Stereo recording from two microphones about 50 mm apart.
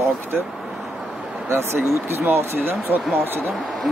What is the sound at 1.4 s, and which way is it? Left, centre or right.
Speech, right.